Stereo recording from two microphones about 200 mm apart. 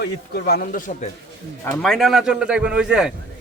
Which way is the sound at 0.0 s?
50° left (ahead or behind).